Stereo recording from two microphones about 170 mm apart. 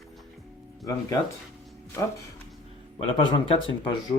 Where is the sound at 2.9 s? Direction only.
30° left (ahead or behind).